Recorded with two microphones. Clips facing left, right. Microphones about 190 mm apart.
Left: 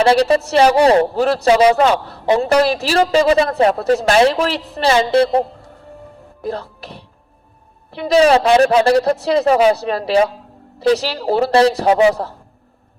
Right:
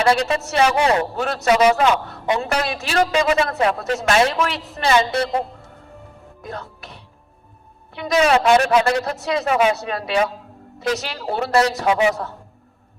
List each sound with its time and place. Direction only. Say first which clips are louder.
0.0 s speech: left 6 dB; 30° left (ahead or behind)